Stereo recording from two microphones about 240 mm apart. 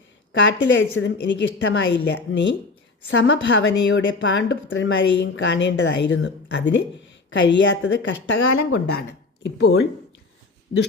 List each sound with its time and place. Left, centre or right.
0.6 s a woman's voice: left